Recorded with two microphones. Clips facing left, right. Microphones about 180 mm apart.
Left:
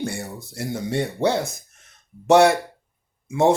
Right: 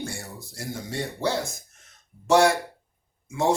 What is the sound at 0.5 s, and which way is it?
Speech, 65° left (ahead or behind).